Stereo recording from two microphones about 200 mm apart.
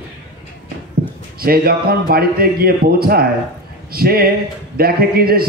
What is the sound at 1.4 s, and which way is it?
A man's voice, 50° right (ahead or behind).